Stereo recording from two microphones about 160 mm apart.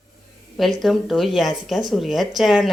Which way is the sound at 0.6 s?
Centre (ahead or behind).